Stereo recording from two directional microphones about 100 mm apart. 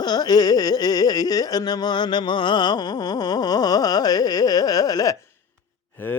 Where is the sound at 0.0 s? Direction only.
45° left (ahead or behind).